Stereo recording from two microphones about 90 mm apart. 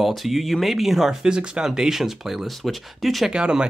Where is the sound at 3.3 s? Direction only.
10° right (ahead or behind).